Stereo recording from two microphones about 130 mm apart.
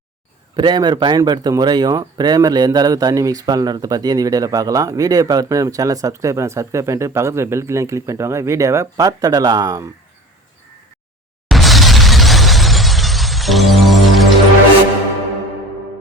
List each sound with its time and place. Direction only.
0.5 s speech: 35° right (ahead or behind)
11.4 s shatter: centre (ahead or behind)